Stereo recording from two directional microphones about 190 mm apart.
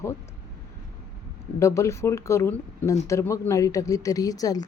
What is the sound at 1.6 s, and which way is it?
A woman's voice, 15° left (ahead or behind).